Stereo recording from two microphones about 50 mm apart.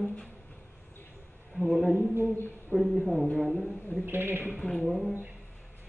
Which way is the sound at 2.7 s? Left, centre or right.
Centre.